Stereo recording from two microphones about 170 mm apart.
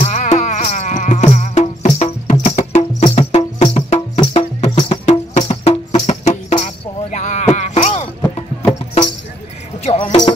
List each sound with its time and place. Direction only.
0.0 s music: 40° left (ahead or behind)
9.8 s music: 40° left (ahead or behind)